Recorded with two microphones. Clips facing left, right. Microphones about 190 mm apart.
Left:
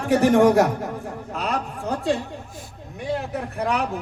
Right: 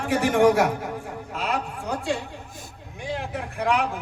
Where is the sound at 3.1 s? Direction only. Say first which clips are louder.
Left 1 dB; 40° left (ahead or behind).